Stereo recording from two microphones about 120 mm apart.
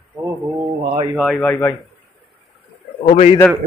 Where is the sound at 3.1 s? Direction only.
70° left (ahead or behind).